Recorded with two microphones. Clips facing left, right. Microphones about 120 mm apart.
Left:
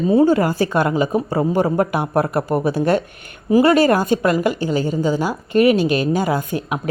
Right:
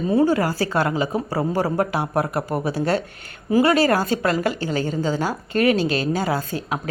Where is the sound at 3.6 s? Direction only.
25° left (ahead or behind).